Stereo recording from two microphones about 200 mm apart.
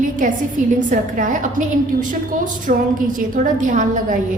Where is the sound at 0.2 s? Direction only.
40° right (ahead or behind).